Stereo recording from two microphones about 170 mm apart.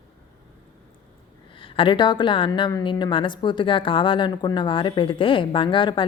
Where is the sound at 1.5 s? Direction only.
30° left (ahead or behind).